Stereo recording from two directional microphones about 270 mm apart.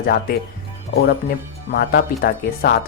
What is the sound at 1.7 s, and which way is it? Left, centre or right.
Speech, left.